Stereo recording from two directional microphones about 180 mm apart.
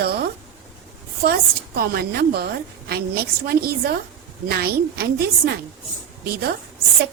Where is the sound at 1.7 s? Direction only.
60° right (ahead or behind).